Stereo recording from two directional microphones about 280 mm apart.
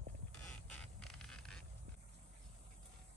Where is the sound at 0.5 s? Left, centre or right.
Centre.